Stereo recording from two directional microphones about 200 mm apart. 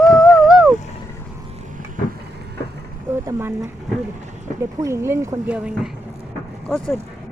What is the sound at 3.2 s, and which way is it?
Speech, 15° right (ahead or behind).